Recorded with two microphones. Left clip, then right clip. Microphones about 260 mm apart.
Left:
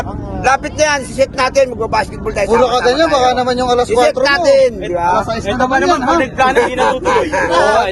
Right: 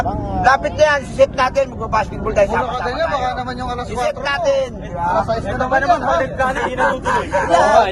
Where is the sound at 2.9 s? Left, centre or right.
Left.